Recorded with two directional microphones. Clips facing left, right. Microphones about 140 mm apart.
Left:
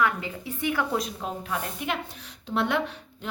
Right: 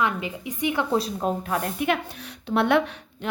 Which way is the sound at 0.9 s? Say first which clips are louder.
Right 5 dB; 35° right (ahead or behind).